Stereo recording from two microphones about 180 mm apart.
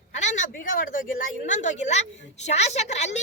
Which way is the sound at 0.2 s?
40° left (ahead or behind).